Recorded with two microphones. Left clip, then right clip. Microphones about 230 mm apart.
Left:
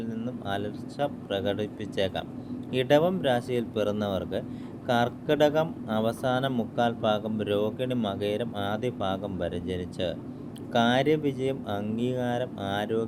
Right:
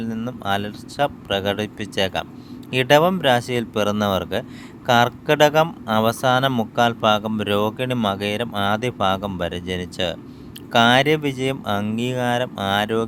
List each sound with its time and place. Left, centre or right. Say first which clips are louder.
0.0 s speech: right 7 dB; right